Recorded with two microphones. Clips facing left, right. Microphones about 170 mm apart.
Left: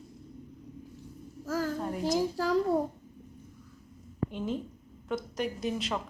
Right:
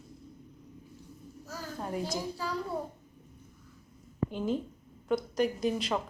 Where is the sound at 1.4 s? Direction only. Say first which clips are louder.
Left 12 dB; 90° left.